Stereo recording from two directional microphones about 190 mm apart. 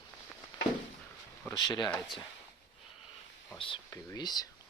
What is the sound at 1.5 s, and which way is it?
Speech, 20° left (ahead or behind).